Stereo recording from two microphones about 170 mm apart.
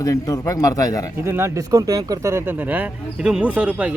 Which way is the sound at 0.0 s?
20° left (ahead or behind).